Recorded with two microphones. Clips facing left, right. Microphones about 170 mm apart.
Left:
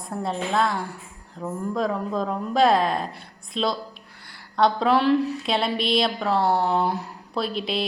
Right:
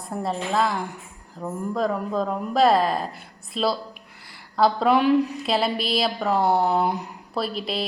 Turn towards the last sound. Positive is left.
turn(degrees=0)  # may be behind; listen again after turning